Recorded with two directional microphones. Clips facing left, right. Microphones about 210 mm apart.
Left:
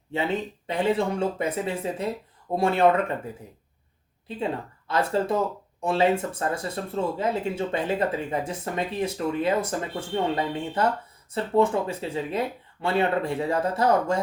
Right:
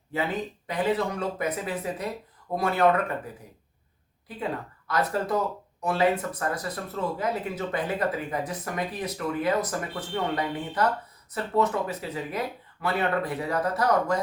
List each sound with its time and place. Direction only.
0.1 s speech: 25° left (ahead or behind)
4.3 s speech: 25° left (ahead or behind)